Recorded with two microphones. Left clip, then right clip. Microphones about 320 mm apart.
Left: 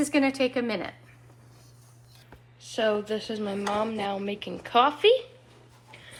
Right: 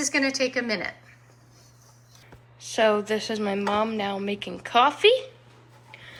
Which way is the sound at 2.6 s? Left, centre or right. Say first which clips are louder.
Right 5 dB; centre.